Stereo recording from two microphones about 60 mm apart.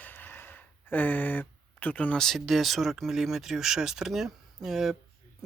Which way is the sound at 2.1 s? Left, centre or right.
Centre.